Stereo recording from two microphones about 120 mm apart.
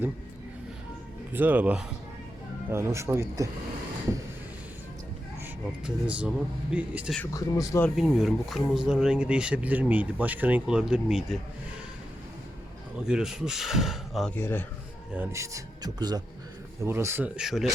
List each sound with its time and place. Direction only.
1.3 s speech: 15° right (ahead or behind)
5.8 s speech: 10° right (ahead or behind)
7.3 s speech: 30° left (ahead or behind)
7.9 s speech: centre (ahead or behind)
13.1 s speech: 5° right (ahead or behind)
14.3 s a man's voice: 15° left (ahead or behind)
15.3 s a man's voice: 25° right (ahead or behind)
16.8 s speech: 20° right (ahead or behind)
17.3 s speech: 5° right (ahead or behind)